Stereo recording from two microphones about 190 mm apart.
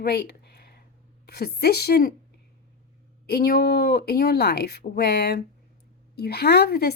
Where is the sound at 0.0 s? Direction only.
60° left (ahead or behind).